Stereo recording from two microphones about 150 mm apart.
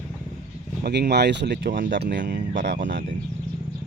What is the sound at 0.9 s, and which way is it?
Speech, 90° right.